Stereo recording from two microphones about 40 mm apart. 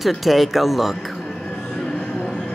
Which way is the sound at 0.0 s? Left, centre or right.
Centre.